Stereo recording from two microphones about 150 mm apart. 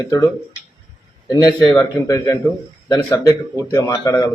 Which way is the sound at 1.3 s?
25° left (ahead or behind).